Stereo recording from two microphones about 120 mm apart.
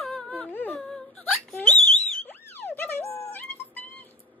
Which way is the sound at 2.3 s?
15° left (ahead or behind).